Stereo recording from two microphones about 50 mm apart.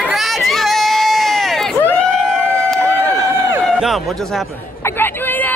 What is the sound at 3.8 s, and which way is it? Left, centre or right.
Speech, centre.